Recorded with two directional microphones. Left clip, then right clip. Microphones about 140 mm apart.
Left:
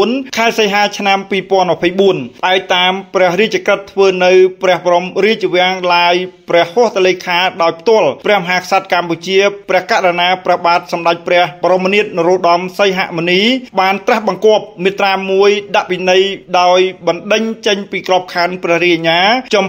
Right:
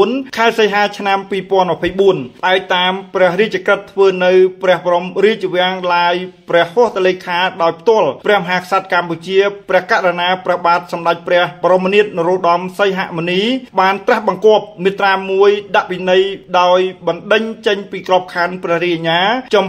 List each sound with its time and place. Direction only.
0.0 s speech: 30° left (ahead or behind)